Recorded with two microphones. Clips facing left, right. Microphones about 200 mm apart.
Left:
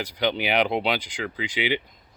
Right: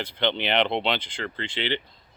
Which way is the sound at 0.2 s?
10° left (ahead or behind).